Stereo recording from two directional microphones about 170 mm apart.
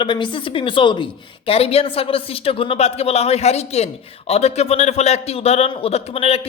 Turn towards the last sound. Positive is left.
turn(degrees=35)  # may be behind; listen again after turning